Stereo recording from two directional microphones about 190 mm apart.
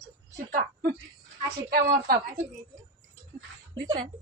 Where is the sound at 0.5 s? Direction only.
55° right (ahead or behind).